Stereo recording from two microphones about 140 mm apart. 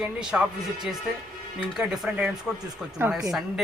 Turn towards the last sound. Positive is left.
turn(degrees=-15)  # may be behind; listen again after turning